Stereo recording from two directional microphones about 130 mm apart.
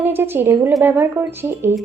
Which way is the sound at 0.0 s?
15° right (ahead or behind).